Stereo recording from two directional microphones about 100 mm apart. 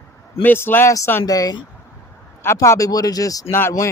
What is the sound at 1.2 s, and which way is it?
A man's voice, 35° left (ahead or behind).